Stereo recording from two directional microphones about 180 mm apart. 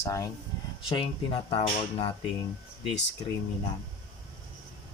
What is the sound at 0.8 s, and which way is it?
Speech, 30° left (ahead or behind).